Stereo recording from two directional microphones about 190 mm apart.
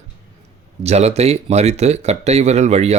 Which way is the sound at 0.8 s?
35° right (ahead or behind).